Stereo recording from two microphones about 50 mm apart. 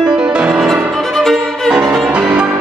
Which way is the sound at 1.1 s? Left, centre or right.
Centre.